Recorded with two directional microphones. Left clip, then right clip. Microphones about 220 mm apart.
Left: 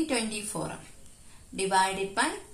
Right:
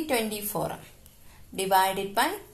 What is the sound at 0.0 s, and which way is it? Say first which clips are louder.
A woman's voice: right 2 dB; 40° right (ahead or behind).